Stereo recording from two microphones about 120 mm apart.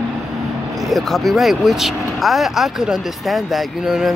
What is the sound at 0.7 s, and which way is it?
Speech, centre (ahead or behind).